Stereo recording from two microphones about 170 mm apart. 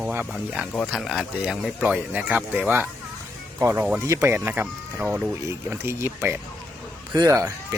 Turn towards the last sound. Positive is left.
turn(degrees=-20)  # may be behind; listen again after turning